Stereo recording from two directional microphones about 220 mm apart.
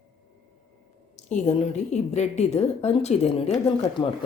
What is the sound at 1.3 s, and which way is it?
A woman's voice, 30° left (ahead or behind).